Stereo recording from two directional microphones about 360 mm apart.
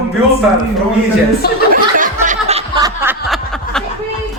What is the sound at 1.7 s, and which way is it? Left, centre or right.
Snicker, right.